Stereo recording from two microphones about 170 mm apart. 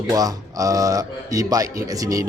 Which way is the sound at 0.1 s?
20° right (ahead or behind).